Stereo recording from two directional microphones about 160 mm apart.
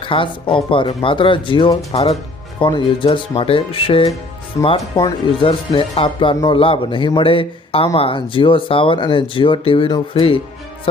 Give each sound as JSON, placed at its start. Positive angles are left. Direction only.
{"t": 0.0, "sound": "speech", "side_deg": 30}
{"t": 4.6, "sound": "speech", "side_deg": 20}
{"t": 5.5, "sound": "speech", "side_deg": 35}